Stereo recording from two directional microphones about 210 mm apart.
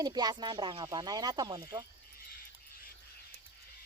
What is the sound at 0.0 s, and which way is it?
Speech, 20° right (ahead or behind).